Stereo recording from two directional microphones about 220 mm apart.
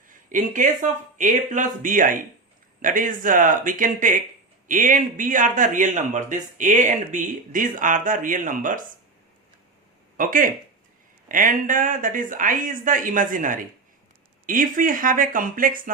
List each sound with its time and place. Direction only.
0.1 s speech: 35° right (ahead or behind)
10.2 s speech: 40° right (ahead or behind)